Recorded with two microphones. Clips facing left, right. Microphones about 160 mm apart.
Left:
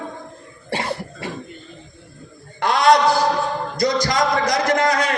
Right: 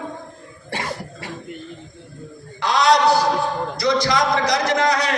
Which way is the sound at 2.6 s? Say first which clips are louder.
Left 1 dB; 55° left (ahead or behind).